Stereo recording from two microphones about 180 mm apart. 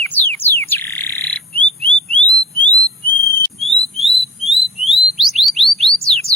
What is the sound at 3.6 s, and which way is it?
Bird, centre (ahead or behind).